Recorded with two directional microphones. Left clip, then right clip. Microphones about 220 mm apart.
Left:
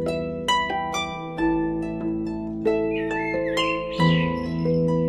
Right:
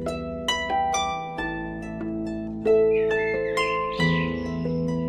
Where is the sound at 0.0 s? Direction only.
Centre (ahead or behind).